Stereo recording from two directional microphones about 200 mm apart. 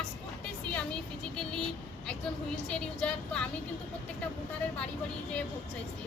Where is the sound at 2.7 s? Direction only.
5° left (ahead or behind).